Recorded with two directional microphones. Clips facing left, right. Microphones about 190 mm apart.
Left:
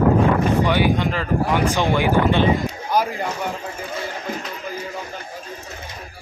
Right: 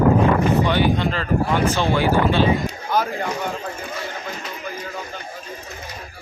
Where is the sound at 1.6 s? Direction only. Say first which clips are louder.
Even; 15° left (ahead or behind).